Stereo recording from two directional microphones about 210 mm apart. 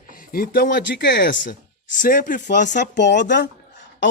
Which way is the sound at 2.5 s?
55° left (ahead or behind).